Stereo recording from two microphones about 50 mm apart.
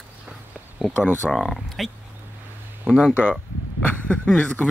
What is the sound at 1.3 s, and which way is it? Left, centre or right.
Speech, centre.